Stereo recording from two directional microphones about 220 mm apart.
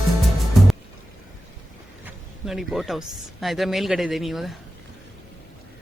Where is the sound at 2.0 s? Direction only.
Centre (ahead or behind).